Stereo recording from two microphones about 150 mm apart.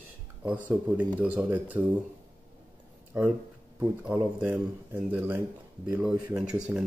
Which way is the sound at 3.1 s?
10° right (ahead or behind).